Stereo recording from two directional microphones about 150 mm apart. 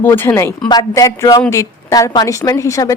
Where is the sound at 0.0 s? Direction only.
15° left (ahead or behind).